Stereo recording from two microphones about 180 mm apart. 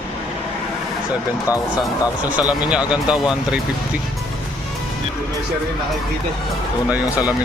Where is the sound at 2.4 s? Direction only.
5° right (ahead or behind).